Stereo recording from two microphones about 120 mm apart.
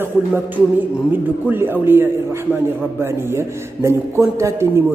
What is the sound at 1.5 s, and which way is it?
A man's voice, 20° right (ahead or behind).